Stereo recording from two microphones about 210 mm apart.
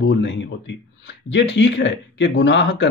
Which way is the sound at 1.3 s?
60° left (ahead or behind).